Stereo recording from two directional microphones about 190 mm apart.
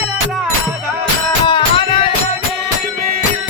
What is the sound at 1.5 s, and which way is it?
Music, 25° left (ahead or behind).